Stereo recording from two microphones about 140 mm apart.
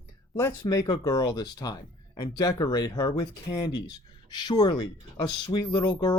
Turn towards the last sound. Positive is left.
turn(degrees=30)  # may be behind; listen again after turning